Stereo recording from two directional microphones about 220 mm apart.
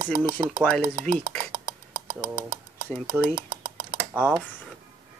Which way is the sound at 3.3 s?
25° right (ahead or behind).